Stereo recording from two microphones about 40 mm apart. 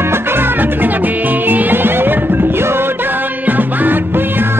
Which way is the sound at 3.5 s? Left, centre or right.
Right.